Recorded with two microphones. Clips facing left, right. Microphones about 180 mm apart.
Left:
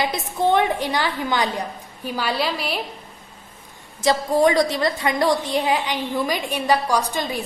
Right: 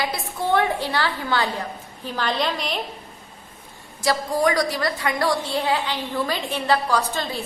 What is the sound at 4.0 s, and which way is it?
A woman's voice, 20° left (ahead or behind).